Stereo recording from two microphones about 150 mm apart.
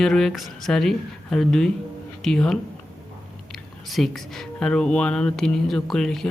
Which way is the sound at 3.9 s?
Centre (ahead or behind).